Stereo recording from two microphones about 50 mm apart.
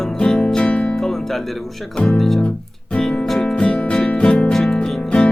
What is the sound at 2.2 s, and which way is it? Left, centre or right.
Speech, centre.